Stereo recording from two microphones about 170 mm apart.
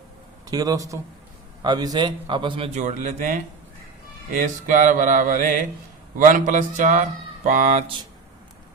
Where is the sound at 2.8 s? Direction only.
45° right (ahead or behind).